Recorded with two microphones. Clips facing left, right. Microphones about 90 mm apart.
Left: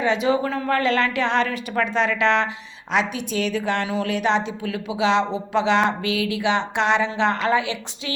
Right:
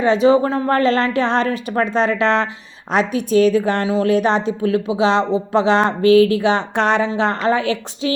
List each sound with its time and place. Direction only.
0.0 s speech: 35° right (ahead or behind)